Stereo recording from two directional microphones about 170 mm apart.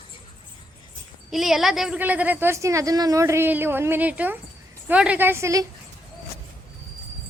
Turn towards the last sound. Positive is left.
turn(degrees=-15)  # may be behind; listen again after turning